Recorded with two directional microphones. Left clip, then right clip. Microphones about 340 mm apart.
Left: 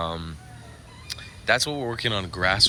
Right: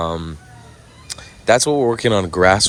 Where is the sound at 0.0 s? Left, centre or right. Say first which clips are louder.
Right 7 dB; centre.